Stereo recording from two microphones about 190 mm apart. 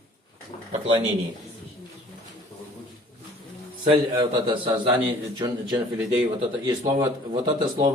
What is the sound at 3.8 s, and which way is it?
A man's voice, 25° right (ahead or behind).